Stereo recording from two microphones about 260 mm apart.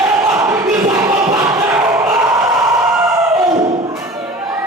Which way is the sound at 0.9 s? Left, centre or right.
Centre.